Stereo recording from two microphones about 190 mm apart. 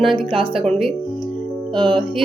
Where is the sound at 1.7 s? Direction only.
25° right (ahead or behind).